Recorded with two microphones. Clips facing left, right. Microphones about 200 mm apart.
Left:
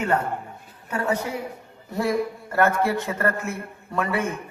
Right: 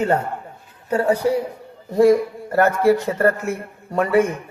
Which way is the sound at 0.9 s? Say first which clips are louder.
Right 8 dB; 35° right (ahead or behind).